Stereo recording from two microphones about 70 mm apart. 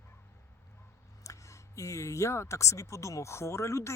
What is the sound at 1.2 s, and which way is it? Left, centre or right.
Speech, left.